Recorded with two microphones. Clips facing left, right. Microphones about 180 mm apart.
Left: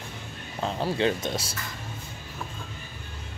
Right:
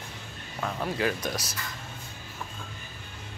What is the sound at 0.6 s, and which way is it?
Speech, 25° left (ahead or behind).